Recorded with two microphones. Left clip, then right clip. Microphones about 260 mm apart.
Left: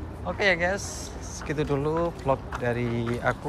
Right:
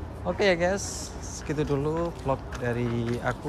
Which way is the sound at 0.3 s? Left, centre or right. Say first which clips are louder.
Even; centre.